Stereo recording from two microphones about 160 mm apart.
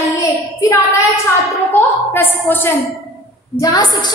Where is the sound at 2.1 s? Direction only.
15° left (ahead or behind).